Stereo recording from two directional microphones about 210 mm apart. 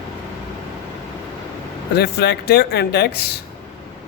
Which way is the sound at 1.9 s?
50° left (ahead or behind).